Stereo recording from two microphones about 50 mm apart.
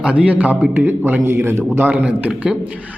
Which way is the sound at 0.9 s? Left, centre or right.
Right.